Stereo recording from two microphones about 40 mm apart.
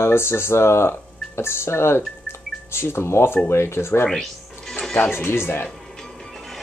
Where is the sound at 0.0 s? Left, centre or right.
Left.